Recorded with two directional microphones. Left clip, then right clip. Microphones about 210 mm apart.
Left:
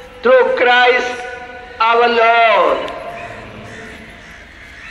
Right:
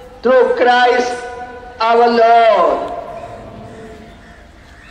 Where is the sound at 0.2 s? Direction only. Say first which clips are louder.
Even; 70° right (ahead or behind).